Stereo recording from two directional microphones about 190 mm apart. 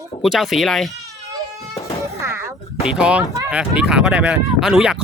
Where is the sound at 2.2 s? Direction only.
15° right (ahead or behind).